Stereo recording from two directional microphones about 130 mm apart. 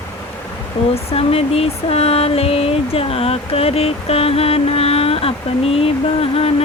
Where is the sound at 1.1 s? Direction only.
50° left (ahead or behind).